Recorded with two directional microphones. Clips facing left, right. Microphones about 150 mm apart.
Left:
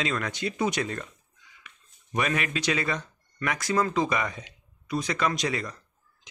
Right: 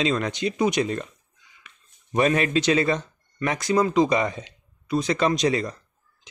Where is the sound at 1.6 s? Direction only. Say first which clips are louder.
Even; 30° right (ahead or behind).